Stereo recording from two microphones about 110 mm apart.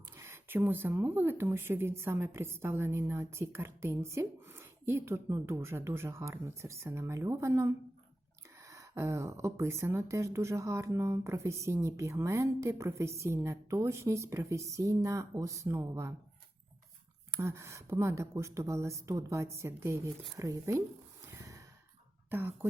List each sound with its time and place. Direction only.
0.2 s speech: 20° right (ahead or behind)
17.4 s speech: 25° right (ahead or behind)
21.2 s sigh: 30° right (ahead or behind)
22.3 s speech: 20° right (ahead or behind)